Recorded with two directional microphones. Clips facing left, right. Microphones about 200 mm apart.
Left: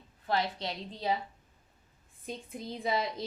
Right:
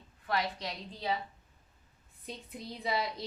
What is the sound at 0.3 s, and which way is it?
Speech, 30° left (ahead or behind).